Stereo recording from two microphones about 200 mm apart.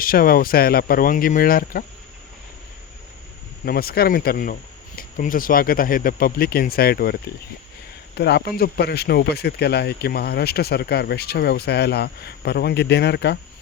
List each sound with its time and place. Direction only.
0.0 s speech: 45° left (ahead or behind)
3.7 s speech: 50° left (ahead or behind)